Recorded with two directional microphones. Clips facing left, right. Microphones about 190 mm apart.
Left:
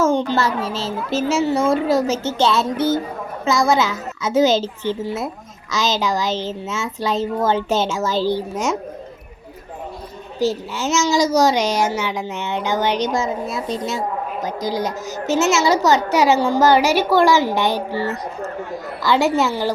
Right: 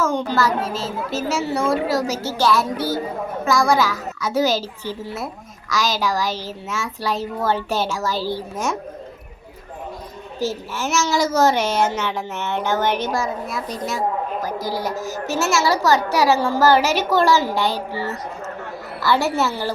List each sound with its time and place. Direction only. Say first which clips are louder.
0.0 s a child's voice: left 3 dB; 25° left (ahead or behind)
10.4 s a child's voice: left 4 dB; 15° left (ahead or behind)
19.0 s a child's voice: left 2 dB; 15° left (ahead or behind)